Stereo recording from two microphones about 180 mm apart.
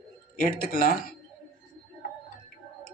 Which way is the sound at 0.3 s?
55° left (ahead or behind).